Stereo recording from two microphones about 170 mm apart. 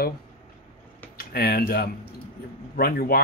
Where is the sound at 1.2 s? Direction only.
65° left (ahead or behind).